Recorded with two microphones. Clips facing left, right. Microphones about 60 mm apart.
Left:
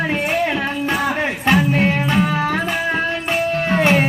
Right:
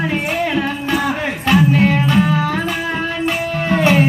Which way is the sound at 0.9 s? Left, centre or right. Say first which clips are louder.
Left 1 dB; left.